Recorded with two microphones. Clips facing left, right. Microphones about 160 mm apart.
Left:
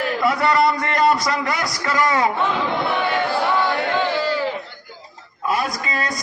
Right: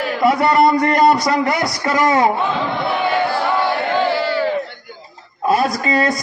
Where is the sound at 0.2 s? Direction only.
25° right (ahead or behind).